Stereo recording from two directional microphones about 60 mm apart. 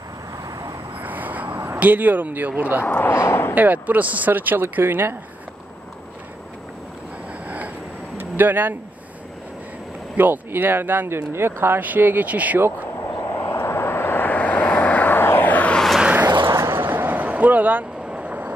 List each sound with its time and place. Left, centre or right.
1.0 s vehicle: right
1.8 s speech: right
2.8 s speech: left
3.5 s speech: right
7.4 s vehicle: right
8.2 s speech: right
10.1 s speech: right
13.3 s vehicle: left
16.5 s vehicle: right
16.8 s a sound: right
18.0 s vehicle: centre